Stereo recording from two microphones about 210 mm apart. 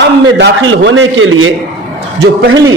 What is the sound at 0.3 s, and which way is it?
A man's voice, 65° right (ahead or behind).